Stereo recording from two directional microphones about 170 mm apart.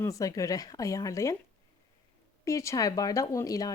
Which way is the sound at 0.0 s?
20° left (ahead or behind).